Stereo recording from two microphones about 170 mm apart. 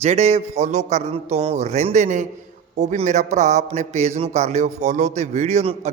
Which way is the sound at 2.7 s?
45° right (ahead or behind).